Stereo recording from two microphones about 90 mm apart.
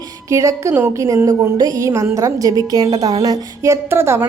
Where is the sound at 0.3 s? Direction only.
35° right (ahead or behind).